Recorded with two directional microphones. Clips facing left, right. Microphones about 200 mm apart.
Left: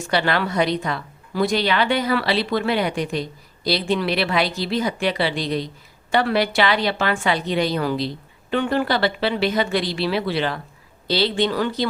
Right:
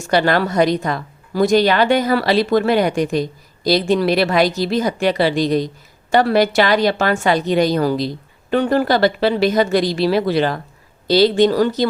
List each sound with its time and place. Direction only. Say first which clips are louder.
0.1 s a woman's voice: right 6 dB; 45° right (ahead or behind)